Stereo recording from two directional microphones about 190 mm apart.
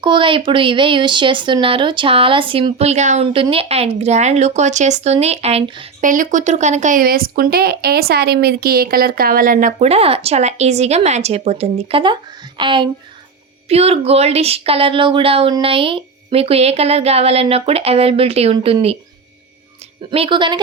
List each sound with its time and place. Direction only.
0.0 s speech: 25° right (ahead or behind)
6.0 s speech: 45° right (ahead or behind)
20.1 s speech: 25° right (ahead or behind)